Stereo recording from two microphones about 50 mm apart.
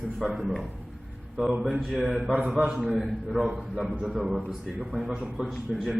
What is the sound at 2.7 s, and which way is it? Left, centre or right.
Speech, centre.